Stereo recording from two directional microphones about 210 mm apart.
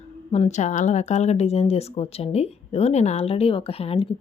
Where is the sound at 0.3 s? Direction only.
30° left (ahead or behind).